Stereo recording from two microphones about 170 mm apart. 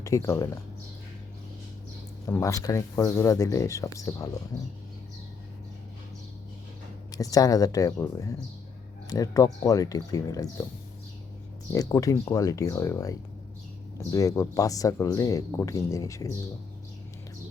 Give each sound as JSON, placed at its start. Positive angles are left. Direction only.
{"t": 0.0, "sound": "speech", "side_deg": 20}
{"t": 2.2, "sound": "speech", "side_deg": 20}
{"t": 7.1, "sound": "speech", "side_deg": 20}
{"t": 11.7, "sound": "speech", "side_deg": 20}